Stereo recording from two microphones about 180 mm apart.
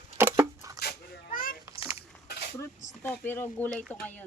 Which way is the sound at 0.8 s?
55° left (ahead or behind).